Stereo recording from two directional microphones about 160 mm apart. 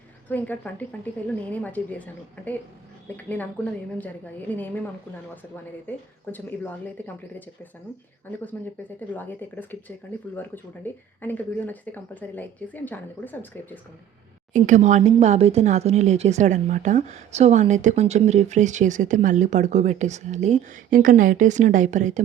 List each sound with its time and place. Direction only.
0.3 s a woman's voice: 10° left (ahead or behind)
6.3 s a woman's voice: 10° left (ahead or behind)
8.5 s a woman's voice: 10° left (ahead or behind)
11.2 s a woman's voice: 10° left (ahead or behind)
14.5 s speech: 50° right (ahead or behind)